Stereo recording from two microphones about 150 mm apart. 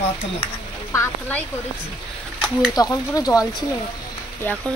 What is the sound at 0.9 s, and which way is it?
Speech, 20° left (ahead or behind).